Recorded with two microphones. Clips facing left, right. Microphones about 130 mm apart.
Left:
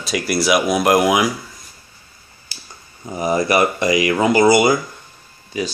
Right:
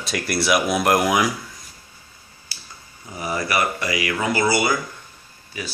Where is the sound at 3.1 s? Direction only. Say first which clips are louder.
Left 7 dB; 20° left (ahead or behind).